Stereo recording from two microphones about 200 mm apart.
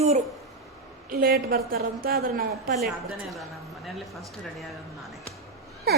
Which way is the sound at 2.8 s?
Centre (ahead or behind).